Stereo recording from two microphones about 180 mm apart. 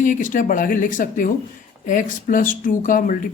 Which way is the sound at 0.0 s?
45° left (ahead or behind).